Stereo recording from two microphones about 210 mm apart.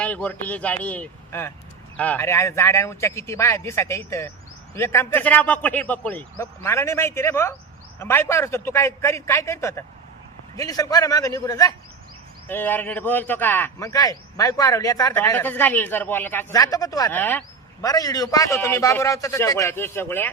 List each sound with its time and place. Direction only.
0.0 s a man's voice: 5° left (ahead or behind)